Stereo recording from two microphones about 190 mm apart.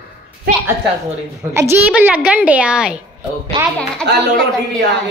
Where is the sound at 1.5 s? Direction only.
10° right (ahead or behind).